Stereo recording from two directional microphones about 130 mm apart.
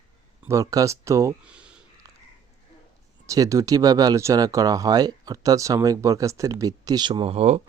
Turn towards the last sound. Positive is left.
turn(degrees=-55)  # may be behind; listen again after turning